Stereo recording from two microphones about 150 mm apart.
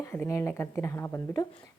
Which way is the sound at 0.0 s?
20° left (ahead or behind).